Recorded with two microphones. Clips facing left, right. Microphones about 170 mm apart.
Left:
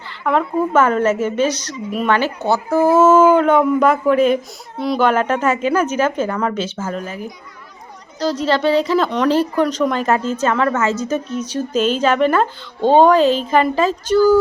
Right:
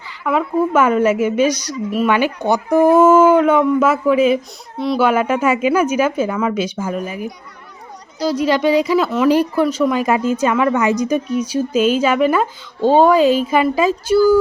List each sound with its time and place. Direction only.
0.3 s speech: 5° right (ahead or behind)